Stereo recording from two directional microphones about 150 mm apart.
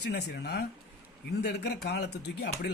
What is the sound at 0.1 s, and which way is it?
Speech, 90° left.